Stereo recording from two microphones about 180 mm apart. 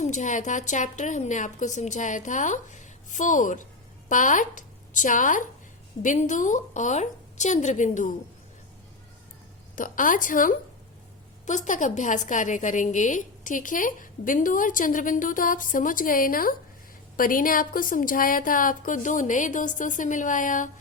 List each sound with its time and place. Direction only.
0.0 s a woman's voice: 45° left (ahead or behind)
9.7 s a woman's voice: 45° left (ahead or behind)